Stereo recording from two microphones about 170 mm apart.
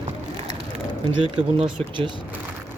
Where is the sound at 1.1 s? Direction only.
30° right (ahead or behind).